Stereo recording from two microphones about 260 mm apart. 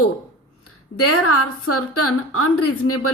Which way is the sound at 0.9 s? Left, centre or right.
Left.